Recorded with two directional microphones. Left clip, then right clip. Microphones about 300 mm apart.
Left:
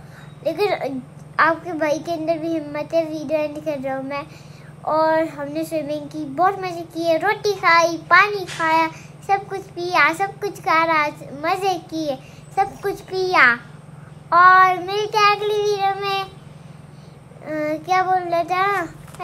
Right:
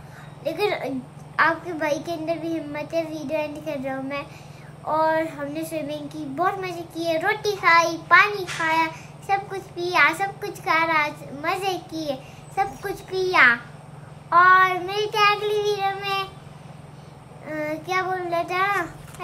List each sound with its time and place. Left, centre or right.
0.4 s a child's voice: centre
17.5 s a child's voice: centre